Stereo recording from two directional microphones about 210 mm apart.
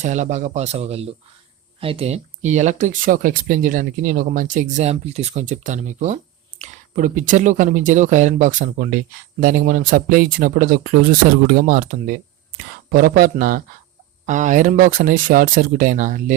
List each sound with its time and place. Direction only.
0.0 s speech: 35° right (ahead or behind)